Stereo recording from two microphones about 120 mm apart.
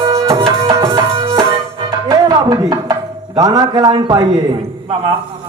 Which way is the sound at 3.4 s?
35° right (ahead or behind).